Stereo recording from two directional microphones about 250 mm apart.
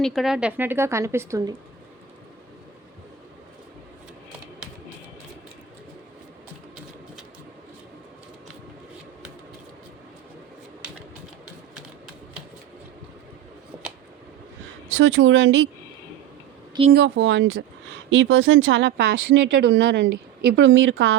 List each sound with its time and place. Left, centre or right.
0.0 s speech: centre
14.9 s speech: right
16.9 s speech: right